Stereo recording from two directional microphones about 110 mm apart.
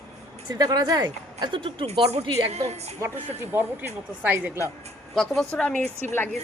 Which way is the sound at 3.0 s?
20° right (ahead or behind).